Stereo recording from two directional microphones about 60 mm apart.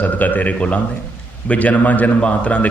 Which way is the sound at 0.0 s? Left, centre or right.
Left.